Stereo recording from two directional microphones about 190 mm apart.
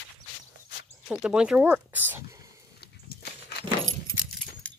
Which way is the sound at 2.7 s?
60° left (ahead or behind).